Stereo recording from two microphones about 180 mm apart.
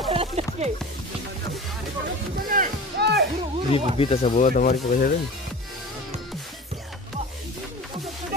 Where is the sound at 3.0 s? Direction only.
65° right (ahead or behind).